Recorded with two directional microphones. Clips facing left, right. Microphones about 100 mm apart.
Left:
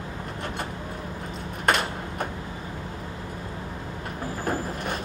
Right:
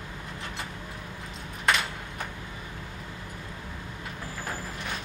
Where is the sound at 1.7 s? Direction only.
45° left (ahead or behind).